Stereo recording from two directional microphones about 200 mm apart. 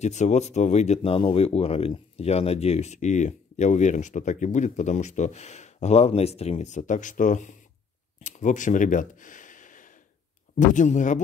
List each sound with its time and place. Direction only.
0.0 s speech: 35° left (ahead or behind)
8.2 s a sound: 40° left (ahead or behind)
10.5 s speech: 40° left (ahead or behind)